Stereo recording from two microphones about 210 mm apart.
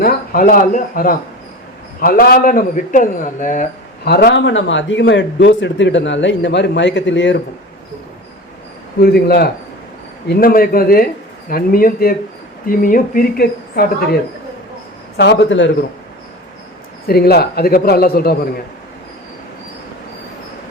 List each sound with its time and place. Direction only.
0.0 s a man's voice: 45° left (ahead or behind); by 7.4 s 60° left (ahead or behind)
9.0 s speech: 45° left (ahead or behind)
15.2 s a man's voice: 55° left (ahead or behind)
17.1 s speech: 50° left (ahead or behind)